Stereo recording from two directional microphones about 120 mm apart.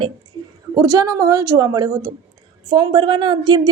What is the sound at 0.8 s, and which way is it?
A woman's voice, 30° right (ahead or behind).